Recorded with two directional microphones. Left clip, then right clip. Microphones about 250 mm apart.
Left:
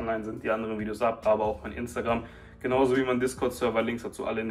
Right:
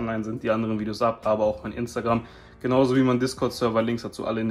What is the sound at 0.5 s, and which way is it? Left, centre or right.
Speech, right.